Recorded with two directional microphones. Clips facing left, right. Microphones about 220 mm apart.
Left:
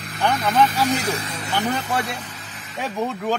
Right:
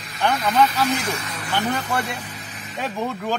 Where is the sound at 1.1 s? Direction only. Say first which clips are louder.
Left 2 dB; 30° left (ahead or behind).